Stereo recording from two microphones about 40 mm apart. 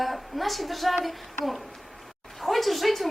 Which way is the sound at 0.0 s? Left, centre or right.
Centre.